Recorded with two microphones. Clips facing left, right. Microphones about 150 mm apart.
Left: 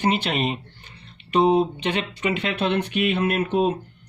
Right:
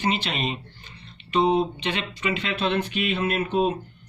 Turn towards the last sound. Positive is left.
turn(degrees=60)  # may be behind; listen again after turning